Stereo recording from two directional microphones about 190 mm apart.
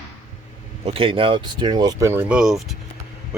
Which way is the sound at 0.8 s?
30° right (ahead or behind).